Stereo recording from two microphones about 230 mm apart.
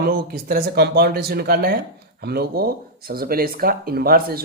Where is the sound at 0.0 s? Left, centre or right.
Right.